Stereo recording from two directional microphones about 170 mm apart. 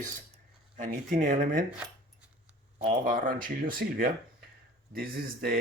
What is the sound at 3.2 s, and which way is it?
Speech, 55° right (ahead or behind).